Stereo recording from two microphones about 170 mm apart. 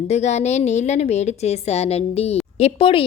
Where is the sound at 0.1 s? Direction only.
40° left (ahead or behind).